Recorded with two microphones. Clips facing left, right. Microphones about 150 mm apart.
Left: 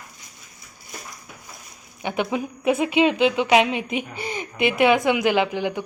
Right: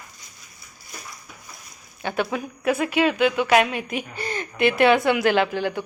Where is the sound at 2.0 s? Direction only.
20° left (ahead or behind).